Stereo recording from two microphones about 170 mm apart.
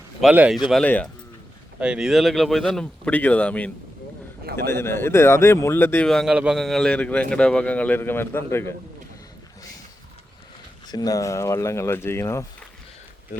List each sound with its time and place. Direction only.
0.2 s a man's voice: 5° right (ahead or behind)
1.8 s speech: 5° right (ahead or behind)
4.7 s a man's voice: 15° left (ahead or behind)
6.1 s a man's voice: centre (ahead or behind); by 8.7 s 15° left (ahead or behind)
10.8 s a man's voice: 20° left (ahead or behind)